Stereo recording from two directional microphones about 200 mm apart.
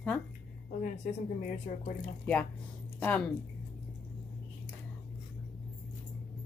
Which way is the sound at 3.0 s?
5° left (ahead or behind).